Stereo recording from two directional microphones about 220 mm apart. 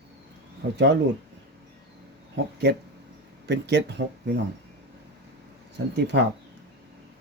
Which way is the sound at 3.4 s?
50° right (ahead or behind).